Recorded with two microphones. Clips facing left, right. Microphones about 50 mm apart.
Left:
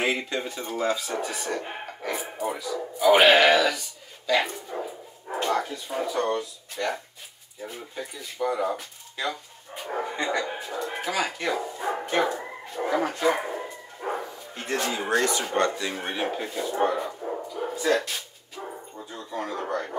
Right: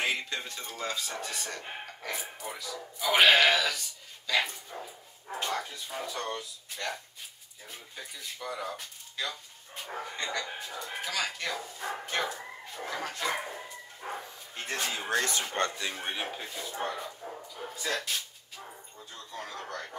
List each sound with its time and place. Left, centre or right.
0.0 s speech: centre
4.6 s dog: left
5.4 s speech: centre
13.6 s bow-wow: left
15.0 s speech: left
17.6 s speech: left
18.6 s dog: left
19.1 s speech: centre